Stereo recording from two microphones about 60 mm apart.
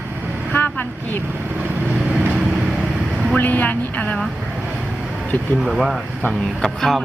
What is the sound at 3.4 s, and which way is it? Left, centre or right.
Speech, left.